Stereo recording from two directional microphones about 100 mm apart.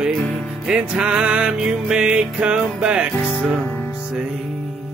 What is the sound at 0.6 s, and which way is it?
Music, 10° right (ahead or behind).